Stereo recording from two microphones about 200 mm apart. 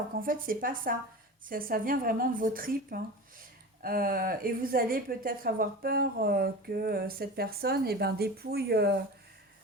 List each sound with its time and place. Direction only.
0.2 s a woman's voice: 45° right (ahead or behind)